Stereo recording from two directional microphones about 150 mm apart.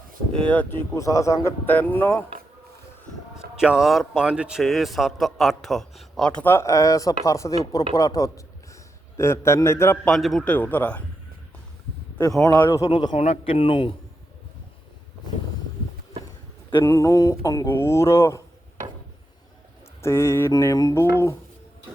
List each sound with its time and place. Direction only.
0.3 s speech: 10° left (ahead or behind)
0.9 s speech: 20° left (ahead or behind)
3.5 s a man's voice: 5° right (ahead or behind); by 10.1 s 15° left (ahead or behind)
10.1 s speech: centre (ahead or behind)
12.4 s speech: 20° left (ahead or behind)
13.1 s speech: 45° left (ahead or behind)
16.8 s speech: 20° left (ahead or behind)
20.0 s speech: 15° left (ahead or behind)